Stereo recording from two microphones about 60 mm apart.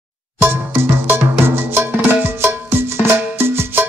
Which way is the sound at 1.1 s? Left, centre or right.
Right.